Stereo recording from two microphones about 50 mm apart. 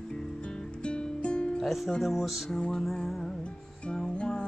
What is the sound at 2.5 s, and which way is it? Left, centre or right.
Music, centre.